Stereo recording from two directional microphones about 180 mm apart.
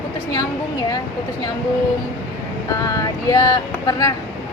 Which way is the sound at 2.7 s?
20° left (ahead or behind).